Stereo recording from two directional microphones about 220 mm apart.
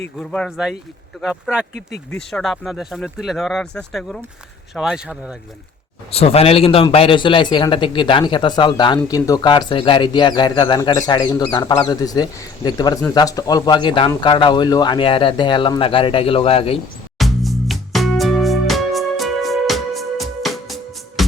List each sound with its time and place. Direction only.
0.2 s speech: 5° left (ahead or behind)
6.1 s a man's voice: 25° left (ahead or behind)
17.2 s music: centre (ahead or behind)